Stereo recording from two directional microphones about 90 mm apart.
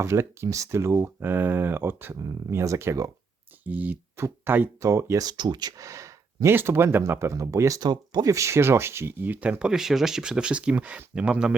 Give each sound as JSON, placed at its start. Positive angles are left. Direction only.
{"t": 0.0, "sound": "speech", "side_deg": -30}
{"t": 3.6, "sound": "speech", "side_deg": -20}
{"t": 5.7, "sound": "a sound", "side_deg": -35}
{"t": 6.5, "sound": "speech", "side_deg": -25}
{"t": 7.8, "sound": "speech", "side_deg": -50}
{"t": 8.3, "sound": "speech", "side_deg": -35}